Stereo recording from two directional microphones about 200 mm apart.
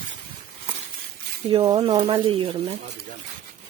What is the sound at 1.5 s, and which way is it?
Speech, 25° right (ahead or behind).